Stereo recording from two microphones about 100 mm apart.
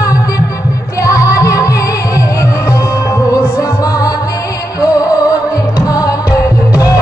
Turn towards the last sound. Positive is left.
turn(degrees=35)  # may be behind; listen again after turning